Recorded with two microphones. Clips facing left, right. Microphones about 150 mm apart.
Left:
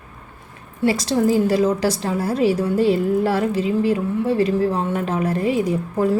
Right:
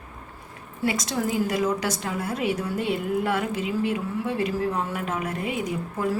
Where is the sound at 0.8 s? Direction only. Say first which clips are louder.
Left 8 dB; 30° left (ahead or behind).